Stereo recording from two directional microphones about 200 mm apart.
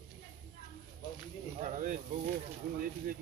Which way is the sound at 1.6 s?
40° right (ahead or behind).